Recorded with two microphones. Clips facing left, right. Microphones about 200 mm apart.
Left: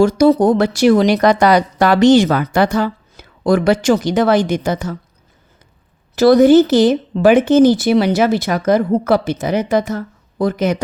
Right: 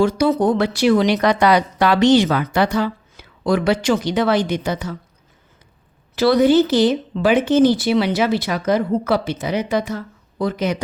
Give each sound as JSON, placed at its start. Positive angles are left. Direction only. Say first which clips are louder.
{"t": 0.0, "sound": "speech", "louder": "left 5 dB", "side_deg": 40}
{"t": 6.1, "sound": "speech", "louder": "left 5 dB", "side_deg": 45}